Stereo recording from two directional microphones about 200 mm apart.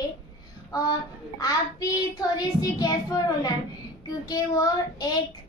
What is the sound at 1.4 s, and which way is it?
Child singing, 20° left (ahead or behind).